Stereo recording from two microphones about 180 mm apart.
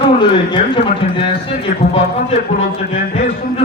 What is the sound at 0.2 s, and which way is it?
A man's voice, 25° left (ahead or behind).